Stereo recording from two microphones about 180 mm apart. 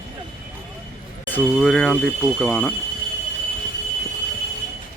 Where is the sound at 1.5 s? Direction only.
5° left (ahead or behind).